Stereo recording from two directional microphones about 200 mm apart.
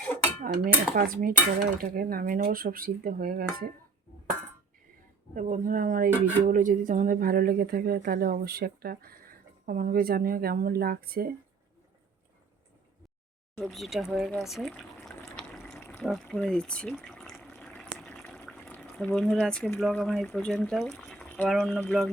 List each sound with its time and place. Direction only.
0.4 s a woman's voice: 45° right (ahead or behind)
5.3 s a woman's voice: 40° right (ahead or behind)
13.6 s speech: centre (ahead or behind)
15.4 s water: 5° left (ahead or behind)